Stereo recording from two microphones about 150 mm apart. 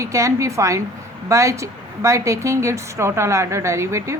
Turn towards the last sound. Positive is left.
turn(degrees=-20)  # may be behind; listen again after turning